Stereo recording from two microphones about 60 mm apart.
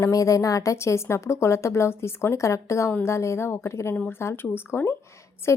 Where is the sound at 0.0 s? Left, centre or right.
Left.